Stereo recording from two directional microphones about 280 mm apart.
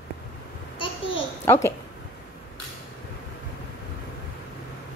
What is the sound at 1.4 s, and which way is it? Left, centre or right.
Speech, centre.